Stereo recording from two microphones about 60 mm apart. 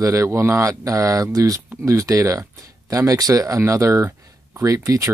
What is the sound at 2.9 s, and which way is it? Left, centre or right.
Speech, right.